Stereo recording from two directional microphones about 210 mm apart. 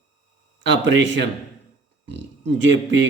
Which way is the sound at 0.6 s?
60° right (ahead or behind).